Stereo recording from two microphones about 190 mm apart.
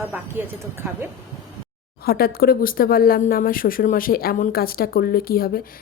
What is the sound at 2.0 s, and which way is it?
A woman's voice, 55° left (ahead or behind).